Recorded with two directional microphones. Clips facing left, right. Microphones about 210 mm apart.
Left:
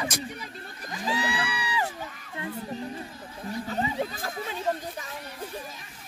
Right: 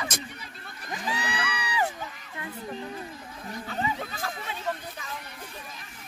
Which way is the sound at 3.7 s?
35° left (ahead or behind).